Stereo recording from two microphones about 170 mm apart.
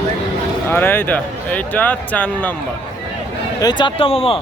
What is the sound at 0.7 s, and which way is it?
Speech, 10° left (ahead or behind).